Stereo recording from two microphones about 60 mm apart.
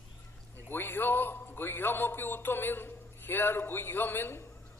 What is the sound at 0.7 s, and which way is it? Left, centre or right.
A man's voice, left.